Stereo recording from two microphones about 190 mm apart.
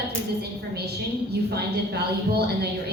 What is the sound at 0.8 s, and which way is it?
A woman's voice, 60° right (ahead or behind).